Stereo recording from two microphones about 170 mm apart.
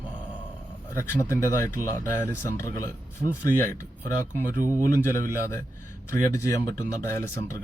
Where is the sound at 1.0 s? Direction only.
15° left (ahead or behind).